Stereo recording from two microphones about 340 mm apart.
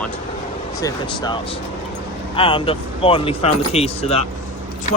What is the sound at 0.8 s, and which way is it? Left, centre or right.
Speech, centre.